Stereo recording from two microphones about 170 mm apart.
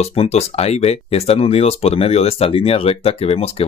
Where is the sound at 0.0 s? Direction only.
35° left (ahead or behind).